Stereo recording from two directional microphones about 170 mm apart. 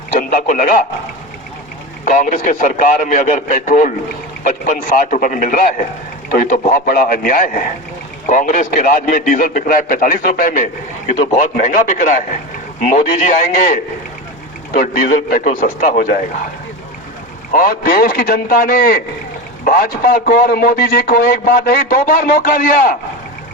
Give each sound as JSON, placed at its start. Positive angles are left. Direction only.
{"t": 0.2, "sound": "a man's voice", "side_deg": 55}
{"t": 2.0, "sound": "a man's voice", "side_deg": 50}
{"t": 11.1, "sound": "a man's voice", "side_deg": 40}
{"t": 14.8, "sound": "a man's voice", "side_deg": 50}
{"t": 17.5, "sound": "a man's voice", "side_deg": 55}